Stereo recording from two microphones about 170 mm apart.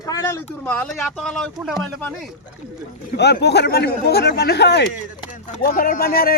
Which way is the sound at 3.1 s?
80° left.